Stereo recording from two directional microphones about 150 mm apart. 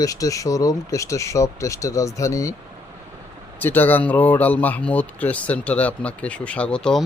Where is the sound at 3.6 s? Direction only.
15° left (ahead or behind).